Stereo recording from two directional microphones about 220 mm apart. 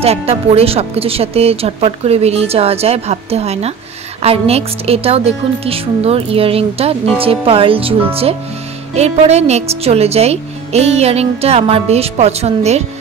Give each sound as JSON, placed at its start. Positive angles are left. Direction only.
{"t": 0.0, "sound": "speech", "side_deg": -25}